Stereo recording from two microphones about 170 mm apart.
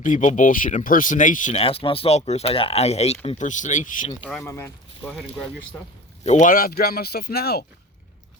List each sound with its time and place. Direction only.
0.0 s speech: 50° left (ahead or behind)
1.6 s speech: 35° left (ahead or behind)
4.4 s speech: 15° left (ahead or behind)
5.0 s speech: centre (ahead or behind)
6.2 s speech: 45° left (ahead or behind); by 7.6 s 70° left (ahead or behind)